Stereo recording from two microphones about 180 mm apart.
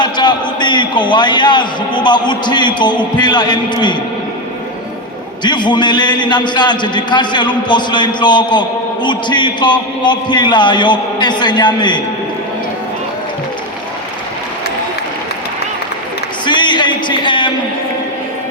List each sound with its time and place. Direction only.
0.0 s a man's voice: 25° left (ahead or behind)
5.4 s a man's voice: 25° left (ahead or behind)
16.5 s a sound: 25° left (ahead or behind)